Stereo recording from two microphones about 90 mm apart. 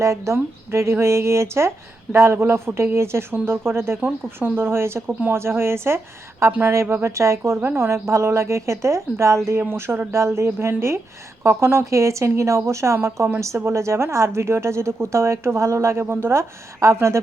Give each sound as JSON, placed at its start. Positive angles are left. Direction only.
{"t": 0.0, "sound": "a woman's voice", "side_deg": -35}